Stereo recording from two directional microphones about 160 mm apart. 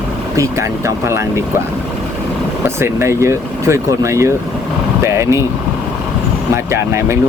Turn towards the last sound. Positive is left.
turn(degrees=-15)  # may be behind; listen again after turning